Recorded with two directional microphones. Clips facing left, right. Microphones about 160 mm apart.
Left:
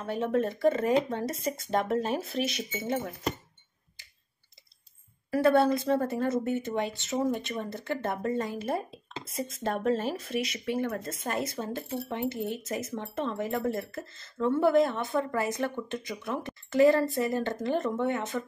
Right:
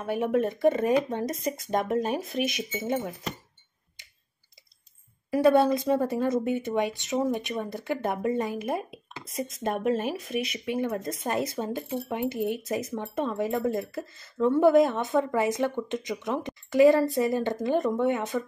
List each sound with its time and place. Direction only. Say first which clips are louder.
0.0 s speech: right 2 dB; 15° right (ahead or behind)
5.3 s speech: right 2 dB; 15° right (ahead or behind)